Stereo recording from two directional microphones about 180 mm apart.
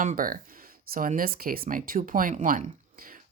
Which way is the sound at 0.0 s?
50° right (ahead or behind).